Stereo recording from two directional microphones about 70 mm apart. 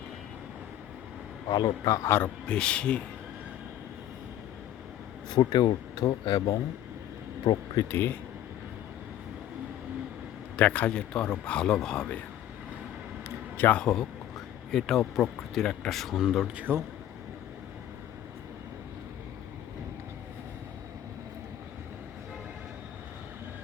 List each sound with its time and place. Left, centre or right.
1.5 s speech: left
2.0 s a man's voice: left
2.5 s speech: centre
5.3 s speech: left
7.9 s a man's voice: left
10.6 s speech: centre
13.7 s speech: centre
16.6 s speech: right